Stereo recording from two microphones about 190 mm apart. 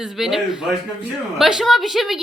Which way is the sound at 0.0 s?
Centre (ahead or behind).